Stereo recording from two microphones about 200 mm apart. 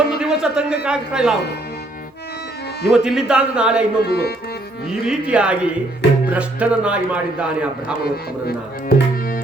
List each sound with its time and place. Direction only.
0.0 s a man's voice: 5° right (ahead or behind)
2.9 s a man's voice: 5° right (ahead or behind)
4.0 s speech: 55° left (ahead or behind)
4.9 s a man's voice: 5° right (ahead or behind)
8.0 s speech: 50° left (ahead or behind)